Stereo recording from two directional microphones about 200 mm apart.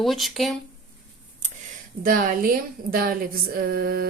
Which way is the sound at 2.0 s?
45° right (ahead or behind).